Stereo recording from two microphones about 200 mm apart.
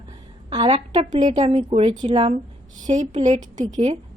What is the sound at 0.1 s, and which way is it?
A woman's voice, 25° right (ahead or behind).